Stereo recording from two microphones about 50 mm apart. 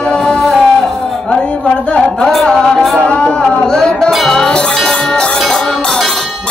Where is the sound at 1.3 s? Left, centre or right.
Left.